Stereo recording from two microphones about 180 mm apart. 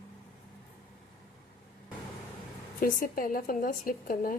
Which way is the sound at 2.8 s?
55° left (ahead or behind).